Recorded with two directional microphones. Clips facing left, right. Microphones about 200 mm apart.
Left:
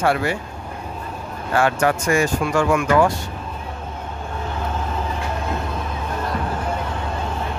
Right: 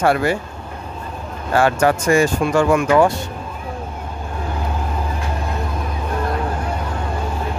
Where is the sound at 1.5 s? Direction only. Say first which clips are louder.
Right 3 dB; 35° right (ahead or behind).